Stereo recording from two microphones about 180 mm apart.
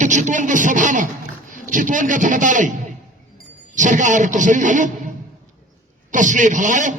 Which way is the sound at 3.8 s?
45° right (ahead or behind).